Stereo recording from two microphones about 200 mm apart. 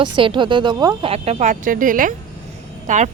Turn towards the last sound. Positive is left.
turn(degrees=-35)  # may be behind; listen again after turning